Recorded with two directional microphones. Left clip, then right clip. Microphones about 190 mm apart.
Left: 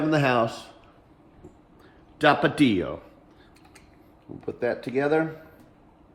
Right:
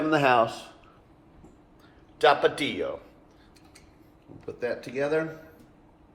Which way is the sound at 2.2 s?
60° left (ahead or behind).